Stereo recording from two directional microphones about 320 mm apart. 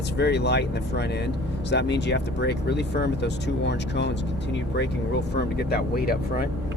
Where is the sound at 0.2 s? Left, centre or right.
Left.